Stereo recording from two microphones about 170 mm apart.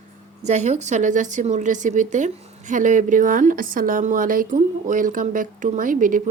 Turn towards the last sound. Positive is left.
turn(degrees=-50)  # may be behind; listen again after turning